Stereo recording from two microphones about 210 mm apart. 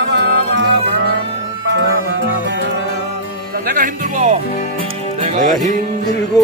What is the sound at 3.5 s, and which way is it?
Music, 40° right (ahead or behind).